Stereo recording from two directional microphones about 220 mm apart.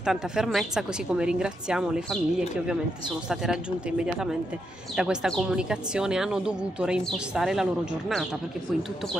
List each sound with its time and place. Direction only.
0.0 s speech: centre (ahead or behind)
4.0 s speech: 5° right (ahead or behind)